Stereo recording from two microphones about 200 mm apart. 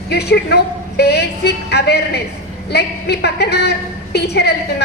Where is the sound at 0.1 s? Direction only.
55° left (ahead or behind).